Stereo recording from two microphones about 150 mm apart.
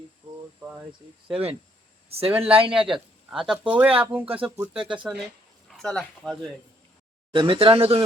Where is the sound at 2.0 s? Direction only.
40° right (ahead or behind).